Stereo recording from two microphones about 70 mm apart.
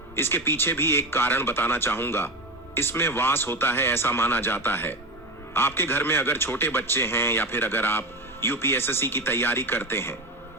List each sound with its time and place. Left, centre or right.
0.2 s a man's voice: left